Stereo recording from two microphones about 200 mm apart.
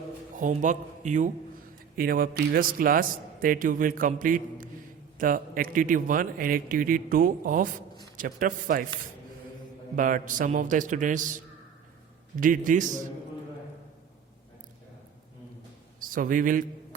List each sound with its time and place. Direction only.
0.3 s a man's voice: 40° right (ahead or behind)
9.9 s a man's voice: 40° right (ahead or behind)
12.4 s a man's voice: 40° right (ahead or behind)
16.0 s speech: 45° right (ahead or behind)